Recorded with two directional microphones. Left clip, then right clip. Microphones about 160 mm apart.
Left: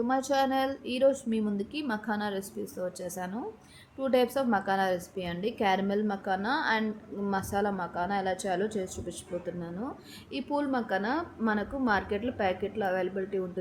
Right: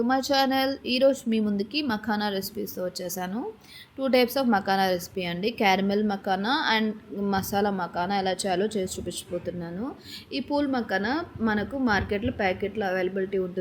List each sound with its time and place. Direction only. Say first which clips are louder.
0.1 s a woman's voice: right 3 dB; 5° right (ahead or behind)
10.3 s a woman's voice: right 4 dB; centre (ahead or behind)